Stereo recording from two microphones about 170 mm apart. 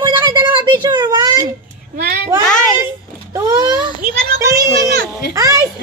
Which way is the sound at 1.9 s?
75° right (ahead or behind).